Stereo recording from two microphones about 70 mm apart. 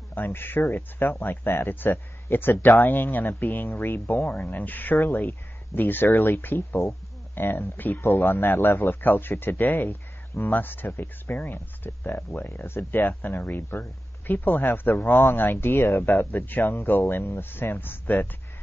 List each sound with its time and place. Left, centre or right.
0.1 s a man's voice: left
9.8 s a sound: left
10.5 s a man's voice: left
10.9 s speech: left
13.5 s speech: left
14.2 s a man's voice: left